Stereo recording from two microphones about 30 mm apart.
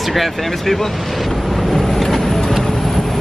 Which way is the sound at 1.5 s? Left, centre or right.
Centre.